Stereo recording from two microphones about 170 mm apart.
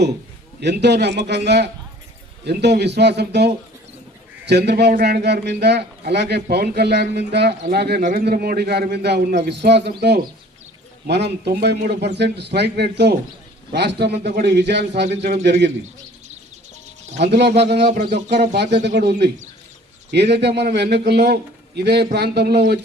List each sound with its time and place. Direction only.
0.6 s a man's voice: 85° right
17.2 s a man's voice: 75° right (ahead or behind)
17.8 s speech: 45° right (ahead or behind)
18.1 s a man's voice: 75° right (ahead or behind)